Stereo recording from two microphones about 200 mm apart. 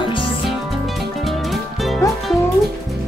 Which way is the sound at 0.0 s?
25° left (ahead or behind).